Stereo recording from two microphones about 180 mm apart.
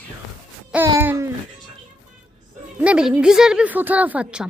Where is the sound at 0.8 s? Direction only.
15° right (ahead or behind).